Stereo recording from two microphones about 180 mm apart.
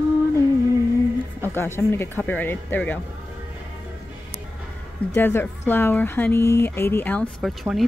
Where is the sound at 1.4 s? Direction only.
15° left (ahead or behind).